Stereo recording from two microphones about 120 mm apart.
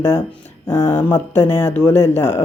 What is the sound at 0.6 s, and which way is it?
Speech, 20° left (ahead or behind).